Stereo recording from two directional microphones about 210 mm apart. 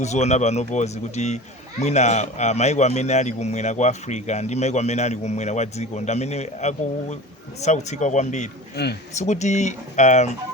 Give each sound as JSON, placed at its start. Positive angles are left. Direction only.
{"t": 0.0, "sound": "a man's voice", "side_deg": 35}
{"t": 8.7, "sound": "speech", "side_deg": 50}
{"t": 9.1, "sound": "a man's voice", "side_deg": 35}